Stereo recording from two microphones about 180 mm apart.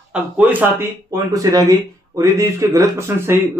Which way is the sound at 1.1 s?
20° right (ahead or behind).